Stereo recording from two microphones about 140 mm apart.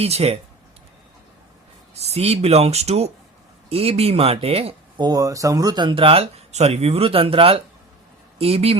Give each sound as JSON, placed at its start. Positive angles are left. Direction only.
{"t": 0.0, "sound": "speech", "side_deg": -50}
{"t": 2.0, "sound": "speech", "side_deg": -50}
{"t": 4.9, "sound": "speech", "side_deg": -30}